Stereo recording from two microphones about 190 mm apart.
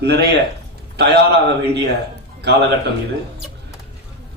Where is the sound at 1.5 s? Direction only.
60° right (ahead or behind).